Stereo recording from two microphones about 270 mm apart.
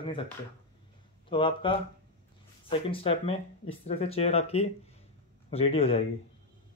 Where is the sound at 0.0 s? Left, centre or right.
Centre.